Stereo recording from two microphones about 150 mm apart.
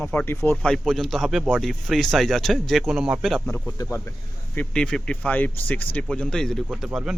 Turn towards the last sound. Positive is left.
turn(degrees=-5)  # may be behind; listen again after turning